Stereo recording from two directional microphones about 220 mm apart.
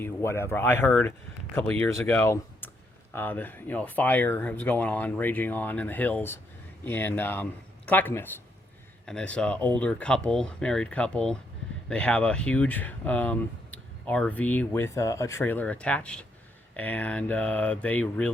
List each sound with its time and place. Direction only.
0.0 s speech: 10° left (ahead or behind)